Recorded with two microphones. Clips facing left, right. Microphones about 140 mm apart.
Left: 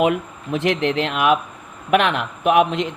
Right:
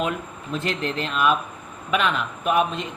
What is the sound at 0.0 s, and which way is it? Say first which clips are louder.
A man's voice: left 8 dB; 65° left (ahead or behind).